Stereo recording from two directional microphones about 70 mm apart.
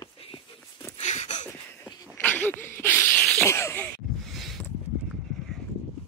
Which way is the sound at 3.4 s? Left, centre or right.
Left.